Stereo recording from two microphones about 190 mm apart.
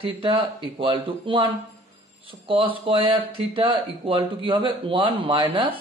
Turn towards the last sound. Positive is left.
turn(degrees=-25)  # may be behind; listen again after turning